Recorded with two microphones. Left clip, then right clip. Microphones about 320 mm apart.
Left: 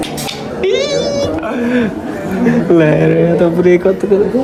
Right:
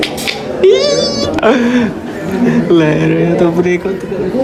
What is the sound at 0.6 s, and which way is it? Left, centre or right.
Speech, centre.